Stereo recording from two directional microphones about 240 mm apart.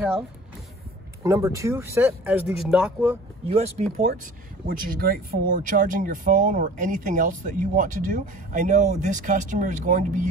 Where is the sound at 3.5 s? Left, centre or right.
Right.